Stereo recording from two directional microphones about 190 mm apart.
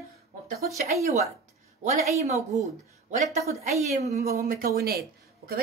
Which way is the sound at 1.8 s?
35° right (ahead or behind).